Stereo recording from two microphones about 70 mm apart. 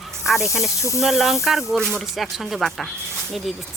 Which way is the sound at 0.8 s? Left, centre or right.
Left.